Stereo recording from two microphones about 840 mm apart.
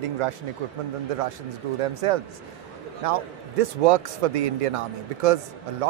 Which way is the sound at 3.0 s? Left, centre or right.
Right.